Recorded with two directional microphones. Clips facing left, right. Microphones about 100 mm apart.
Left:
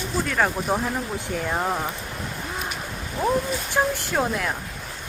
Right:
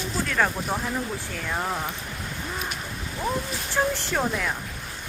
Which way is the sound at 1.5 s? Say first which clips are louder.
Left 2 dB; 20° left (ahead or behind).